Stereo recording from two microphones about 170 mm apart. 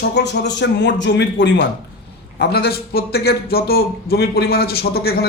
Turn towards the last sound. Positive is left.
turn(degrees=70)  # may be behind; listen again after turning